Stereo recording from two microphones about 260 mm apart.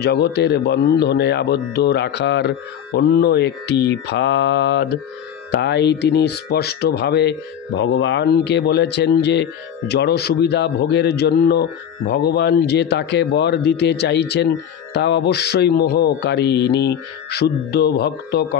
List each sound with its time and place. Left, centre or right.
0.0 s speech: left